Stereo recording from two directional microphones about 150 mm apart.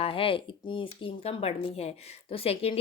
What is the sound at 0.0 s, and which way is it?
Speech, 35° left (ahead or behind).